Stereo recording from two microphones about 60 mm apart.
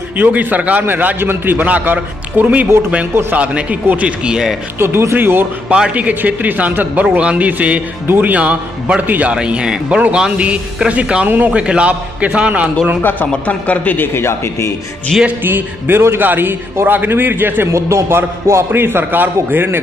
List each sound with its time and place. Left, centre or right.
0.2 s a man's voice: right; by 4.6 s centre
4.7 s a man's voice: right
5.7 s a man's voice: centre
9.0 s a man's voice: right
9.3 s a man's voice: centre
11.2 s a man's voice: right
11.6 s a man's voice: centre
13.0 s a man's voice: left
14.1 s speech: left
15.1 s music: centre
15.4 s a man's voice: right
17.7 s a man's voice: right
18.0 s music: right
18.7 s a man's voice: right